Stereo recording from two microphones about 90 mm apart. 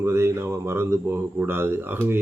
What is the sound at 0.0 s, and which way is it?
Speech, 30° right (ahead or behind).